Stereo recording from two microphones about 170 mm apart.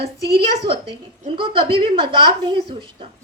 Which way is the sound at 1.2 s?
30° right (ahead or behind).